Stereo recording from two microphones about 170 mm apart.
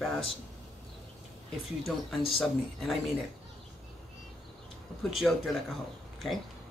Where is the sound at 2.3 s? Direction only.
Centre (ahead or behind).